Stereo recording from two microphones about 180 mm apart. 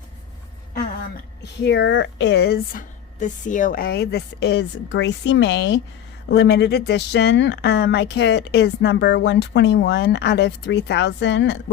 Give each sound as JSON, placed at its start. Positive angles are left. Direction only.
{"t": 1.4, "sound": "speech", "side_deg": 75}
{"t": 3.2, "sound": "speech", "side_deg": 45}